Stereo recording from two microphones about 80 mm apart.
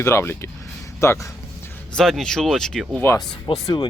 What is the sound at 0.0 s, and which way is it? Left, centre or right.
Speech, left.